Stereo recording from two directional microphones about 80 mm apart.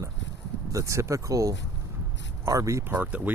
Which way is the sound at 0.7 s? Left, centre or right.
Right.